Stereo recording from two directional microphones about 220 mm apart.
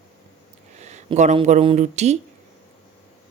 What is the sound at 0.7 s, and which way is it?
Speech, 30° right (ahead or behind).